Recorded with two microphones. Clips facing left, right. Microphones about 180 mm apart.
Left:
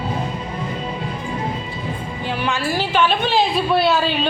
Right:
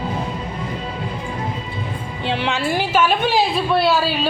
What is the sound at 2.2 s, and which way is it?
Music, 25° right (ahead or behind).